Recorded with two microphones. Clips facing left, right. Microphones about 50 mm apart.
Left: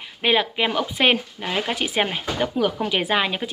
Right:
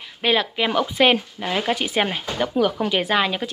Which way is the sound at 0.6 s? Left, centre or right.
Centre.